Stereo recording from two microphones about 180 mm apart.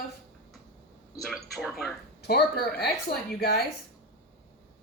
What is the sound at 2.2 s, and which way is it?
A woman's voice, 60° left (ahead or behind).